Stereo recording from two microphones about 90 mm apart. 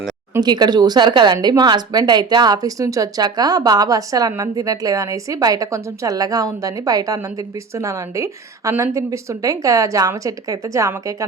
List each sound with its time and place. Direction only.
0.3 s a woman's voice: 50° right (ahead or behind); by 11.3 s 35° right (ahead or behind)